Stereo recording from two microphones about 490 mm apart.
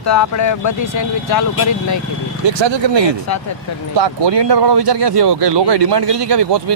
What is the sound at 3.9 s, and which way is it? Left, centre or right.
Speech, right.